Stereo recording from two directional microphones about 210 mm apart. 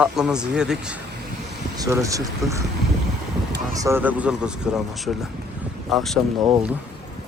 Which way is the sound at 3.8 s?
10° right (ahead or behind).